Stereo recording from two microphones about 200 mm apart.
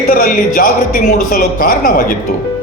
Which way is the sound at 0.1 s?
45° left (ahead or behind).